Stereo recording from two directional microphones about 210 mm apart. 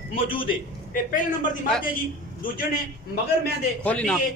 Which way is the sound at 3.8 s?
5° left (ahead or behind).